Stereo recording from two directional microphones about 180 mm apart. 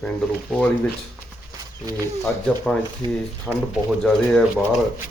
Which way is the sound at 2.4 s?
5° left (ahead or behind).